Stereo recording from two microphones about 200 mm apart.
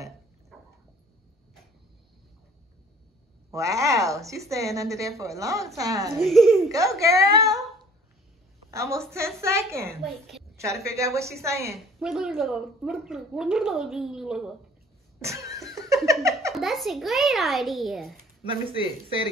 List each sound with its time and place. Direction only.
0.5 s a sound: centre (ahead or behind)
3.5 s a woman's voice: 15° right (ahead or behind)
6.1 s a woman's voice: centre (ahead or behind)
6.7 s a woman's voice: 15° right (ahead or behind)
8.6 s a woman's voice: 15° right (ahead or behind)
10.0 s a woman's voice: centre (ahead or behind)
10.6 s a woman's voice: 15° right (ahead or behind)
12.0 s a woman's voice: 5° right (ahead or behind)
15.1 s a sound: 15° right (ahead or behind)
16.5 s a woman's voice: centre (ahead or behind)
18.4 s a man's voice: 25° right (ahead or behind)